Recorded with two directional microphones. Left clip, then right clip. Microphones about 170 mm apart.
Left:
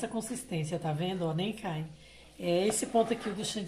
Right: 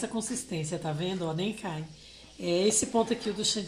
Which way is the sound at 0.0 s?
15° right (ahead or behind).